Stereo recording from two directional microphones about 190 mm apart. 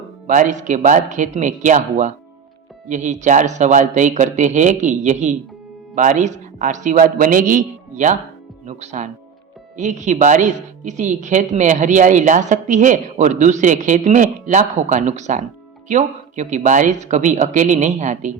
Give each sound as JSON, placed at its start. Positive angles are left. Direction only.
{"t": 0.3, "sound": "speech", "side_deg": -40}